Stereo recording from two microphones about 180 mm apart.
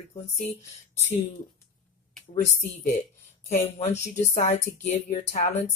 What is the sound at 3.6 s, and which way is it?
Speech, 35° left (ahead or behind).